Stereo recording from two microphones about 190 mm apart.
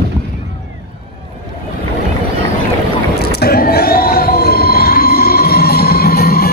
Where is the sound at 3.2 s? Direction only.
55° left (ahead or behind).